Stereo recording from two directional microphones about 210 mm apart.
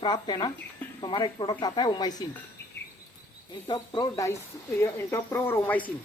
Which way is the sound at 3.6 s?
20° left (ahead or behind).